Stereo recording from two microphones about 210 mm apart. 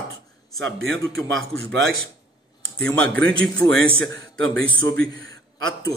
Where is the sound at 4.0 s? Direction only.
65° right (ahead or behind).